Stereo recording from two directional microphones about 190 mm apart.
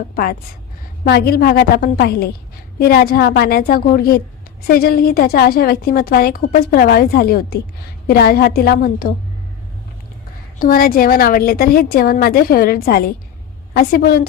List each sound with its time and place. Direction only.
0.2 s a woman's voice: 50° left (ahead or behind)
10.6 s a woman's voice: 50° left (ahead or behind)